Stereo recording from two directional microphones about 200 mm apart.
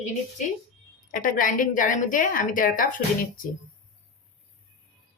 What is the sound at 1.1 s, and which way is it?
A woman's voice, 40° left (ahead or behind).